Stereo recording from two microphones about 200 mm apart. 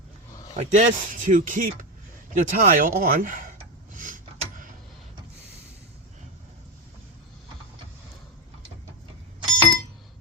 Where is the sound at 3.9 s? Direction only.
40° right (ahead or behind).